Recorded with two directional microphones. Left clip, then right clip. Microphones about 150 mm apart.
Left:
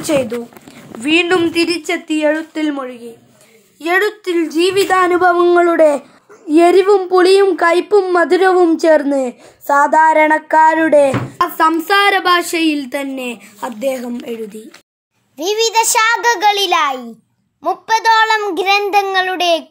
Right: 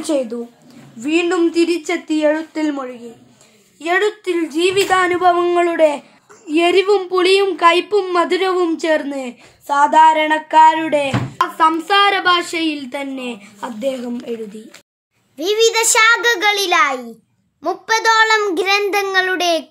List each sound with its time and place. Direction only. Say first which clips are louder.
0.1 s a child's voice: left 6 dB; 15° left (ahead or behind); by 14.4 s 40° left (ahead or behind)
15.3 s a child's voice: left 1 dB; 10° left (ahead or behind)
17.6 s a child's voice: left 2 dB; centre (ahead or behind)